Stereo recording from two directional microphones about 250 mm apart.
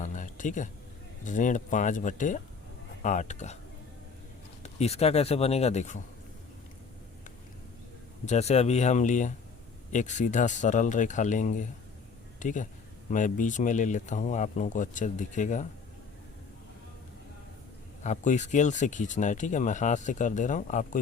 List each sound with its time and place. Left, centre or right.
0.0 s a sound: left
1.2 s speech: left
4.6 s speech: left
8.2 s speech: left
18.0 s speech: left